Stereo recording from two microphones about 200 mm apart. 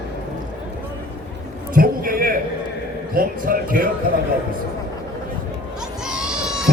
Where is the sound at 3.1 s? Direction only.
45° right (ahead or behind).